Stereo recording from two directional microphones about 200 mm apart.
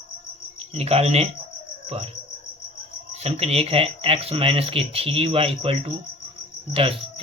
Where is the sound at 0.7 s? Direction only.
30° right (ahead or behind).